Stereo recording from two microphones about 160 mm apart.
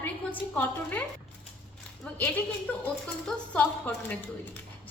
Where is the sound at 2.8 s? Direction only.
10° left (ahead or behind).